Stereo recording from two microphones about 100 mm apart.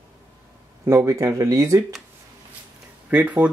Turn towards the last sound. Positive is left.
turn(degrees=-15)  # may be behind; listen again after turning